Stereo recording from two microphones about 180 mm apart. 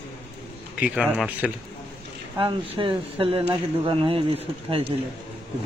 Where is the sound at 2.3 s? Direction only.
30° right (ahead or behind).